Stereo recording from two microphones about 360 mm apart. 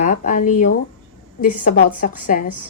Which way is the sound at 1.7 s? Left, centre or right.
Left.